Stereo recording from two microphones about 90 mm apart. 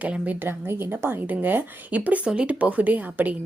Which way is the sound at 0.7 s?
25° right (ahead or behind).